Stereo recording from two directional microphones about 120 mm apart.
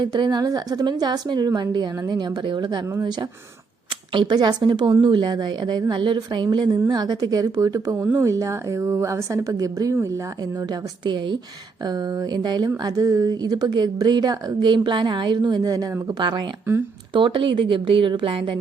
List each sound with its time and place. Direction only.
0.0 s speech: 40° right (ahead or behind)
10.7 s speech: 40° right (ahead or behind)